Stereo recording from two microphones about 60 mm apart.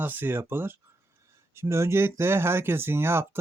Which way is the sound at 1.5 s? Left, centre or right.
Right.